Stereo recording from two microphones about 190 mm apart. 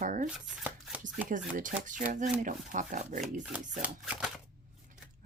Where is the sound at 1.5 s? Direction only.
45° right (ahead or behind).